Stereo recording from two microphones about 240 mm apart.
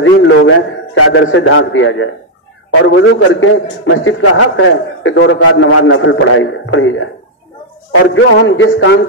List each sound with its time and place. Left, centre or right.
0.0 s a man's voice: left